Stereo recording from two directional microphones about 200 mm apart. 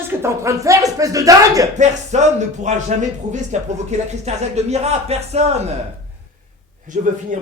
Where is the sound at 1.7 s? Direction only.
35° right (ahead or behind).